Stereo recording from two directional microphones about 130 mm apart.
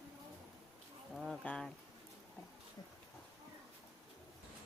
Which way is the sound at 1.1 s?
Centre (ahead or behind).